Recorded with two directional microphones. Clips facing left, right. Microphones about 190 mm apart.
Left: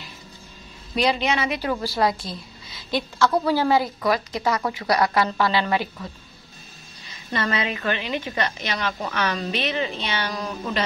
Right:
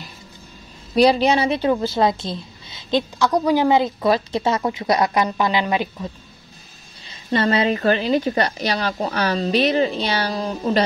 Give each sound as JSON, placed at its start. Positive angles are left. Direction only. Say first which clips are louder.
{"t": 0.9, "sound": "a woman's voice", "louder": "right 7 dB", "side_deg": -35}
{"t": 7.1, "sound": "a woman's voice", "louder": "right 7 dB", "side_deg": -30}